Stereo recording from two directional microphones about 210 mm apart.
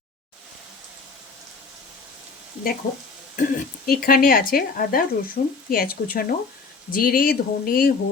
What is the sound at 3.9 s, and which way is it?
Speech, 45° left (ahead or behind).